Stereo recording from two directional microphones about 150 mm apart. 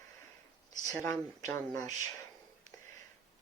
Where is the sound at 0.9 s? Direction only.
20° left (ahead or behind).